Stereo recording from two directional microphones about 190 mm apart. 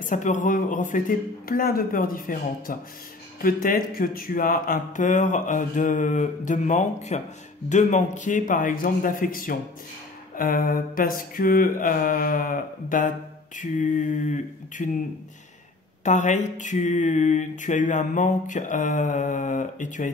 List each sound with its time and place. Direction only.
0.0 s speech: 40° left (ahead or behind)
3.4 s mantra: 45° left (ahead or behind)
7.7 s speech: 40° left (ahead or behind)
13.6 s mantra: 40° left (ahead or behind)
16.0 s mantra: 40° left (ahead or behind)